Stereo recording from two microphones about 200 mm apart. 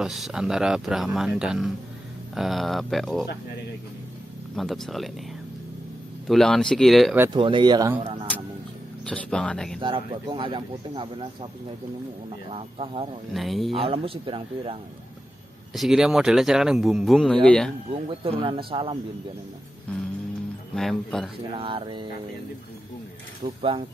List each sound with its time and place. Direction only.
0.0 s speech: centre (ahead or behind)
4.6 s speech: centre (ahead or behind)
6.2 s speech: centre (ahead or behind)
7.3 s speech: 25° right (ahead or behind)
9.0 s speech: 5° left (ahead or behind)
9.8 s speech: 25° right (ahead or behind)
12.4 s speech: 30° right (ahead or behind)
13.3 s speech: centre (ahead or behind)
13.7 s speech: 30° right (ahead or behind)
15.7 s speech: centre (ahead or behind)
17.9 s speech: 30° right (ahead or behind)
20.7 s speech: centre (ahead or behind)
21.5 s speech: 25° right (ahead or behind)
23.4 s speech: 25° right (ahead or behind)